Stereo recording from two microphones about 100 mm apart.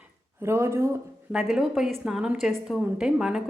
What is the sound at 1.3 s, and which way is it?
A woman's voice, 5° right (ahead or behind).